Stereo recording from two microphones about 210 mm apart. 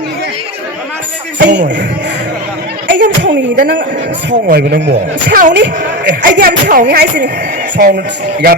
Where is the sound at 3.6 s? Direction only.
55° right (ahead or behind).